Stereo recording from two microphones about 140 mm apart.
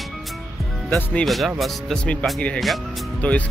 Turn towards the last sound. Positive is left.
turn(degrees=10)  # may be behind; listen again after turning